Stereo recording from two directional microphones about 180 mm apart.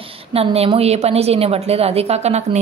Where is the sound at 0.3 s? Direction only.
35° right (ahead or behind).